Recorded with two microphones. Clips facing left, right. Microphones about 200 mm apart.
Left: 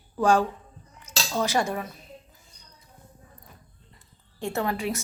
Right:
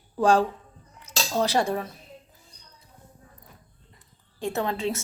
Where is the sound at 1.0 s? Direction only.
35° right (ahead or behind).